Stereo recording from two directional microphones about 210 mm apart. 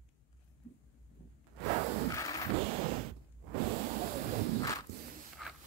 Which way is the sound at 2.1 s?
15° left (ahead or behind).